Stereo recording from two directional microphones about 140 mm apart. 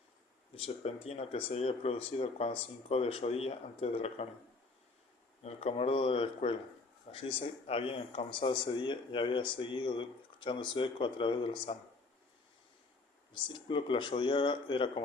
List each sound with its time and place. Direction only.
0.5 s speech: 45° left (ahead or behind)
5.4 s speech: 45° left (ahead or behind)
13.5 s speech: 35° left (ahead or behind)